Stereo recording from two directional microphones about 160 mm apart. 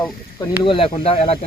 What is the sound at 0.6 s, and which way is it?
Speech, 35° left (ahead or behind).